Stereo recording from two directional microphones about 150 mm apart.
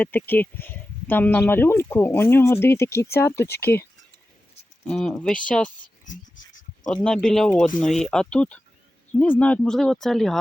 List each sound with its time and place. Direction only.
0.0 s speech: 10° left (ahead or behind)
4.9 s speech: 5° left (ahead or behind)
6.1 s a sound: 60° left (ahead or behind)
6.9 s speech: 5° left (ahead or behind)